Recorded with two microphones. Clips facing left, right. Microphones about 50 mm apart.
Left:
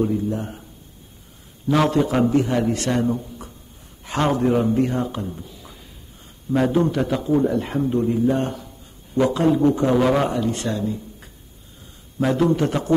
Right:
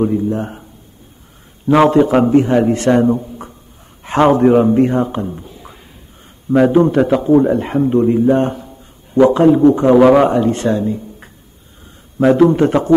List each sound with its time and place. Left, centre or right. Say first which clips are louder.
0.0 s a man's voice: right 6 dB; right
1.7 s a man's voice: right 8 dB; right